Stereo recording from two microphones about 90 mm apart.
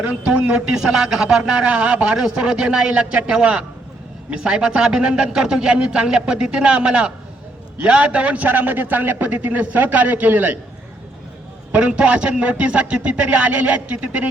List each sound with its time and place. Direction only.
0.0 s a man's voice: 10° right (ahead or behind)
11.7 s speech: 15° right (ahead or behind)